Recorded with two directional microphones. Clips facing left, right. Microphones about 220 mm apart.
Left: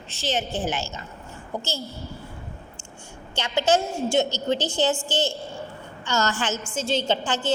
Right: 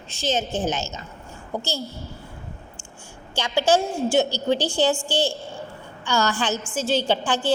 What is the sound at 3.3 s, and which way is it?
A woman's voice, 10° right (ahead or behind).